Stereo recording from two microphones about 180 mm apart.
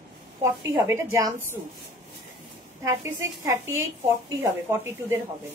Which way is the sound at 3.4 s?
15° right (ahead or behind).